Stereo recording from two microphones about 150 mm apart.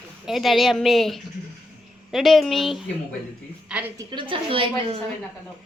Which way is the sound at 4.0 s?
35° right (ahead or behind).